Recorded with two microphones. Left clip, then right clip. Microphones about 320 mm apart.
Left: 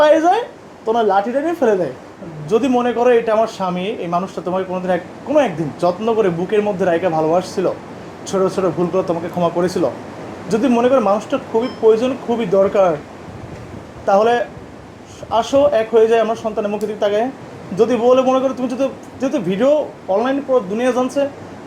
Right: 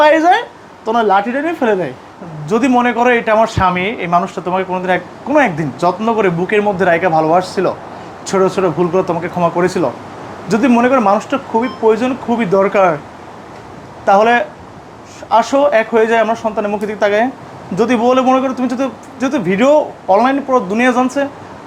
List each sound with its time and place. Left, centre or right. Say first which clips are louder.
0.0 s a woman's voice: right 3 dB; right
14.0 s speech: right 4 dB; right